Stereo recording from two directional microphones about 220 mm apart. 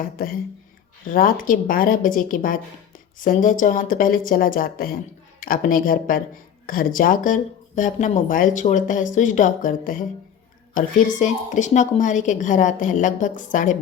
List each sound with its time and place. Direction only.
1.0 s a woman's voice: 40° left (ahead or behind)